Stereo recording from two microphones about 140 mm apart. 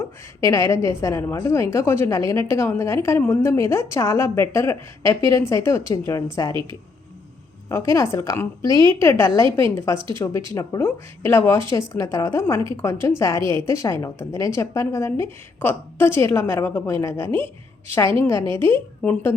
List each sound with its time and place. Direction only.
0.4 s a woman's voice: 20° left (ahead or behind)
6.5 s a woman's voice: 35° right (ahead or behind)
7.7 s a woman's voice: 20° left (ahead or behind)